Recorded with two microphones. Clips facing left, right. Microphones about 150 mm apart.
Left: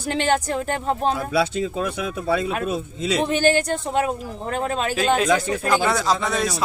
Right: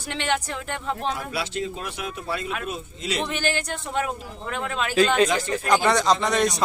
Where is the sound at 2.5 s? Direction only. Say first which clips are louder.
Left 6 dB; 40° left (ahead or behind).